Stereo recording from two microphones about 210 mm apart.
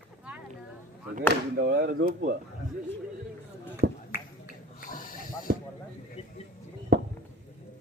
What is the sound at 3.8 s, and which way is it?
Finger snapping, 50° right (ahead or behind).